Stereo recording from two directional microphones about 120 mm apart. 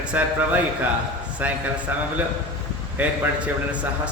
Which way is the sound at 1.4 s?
15° right (ahead or behind).